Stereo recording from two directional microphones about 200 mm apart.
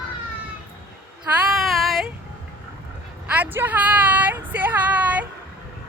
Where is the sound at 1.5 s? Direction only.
Centre (ahead or behind).